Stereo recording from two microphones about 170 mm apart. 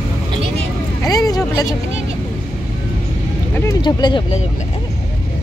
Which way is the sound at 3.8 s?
25° left (ahead or behind).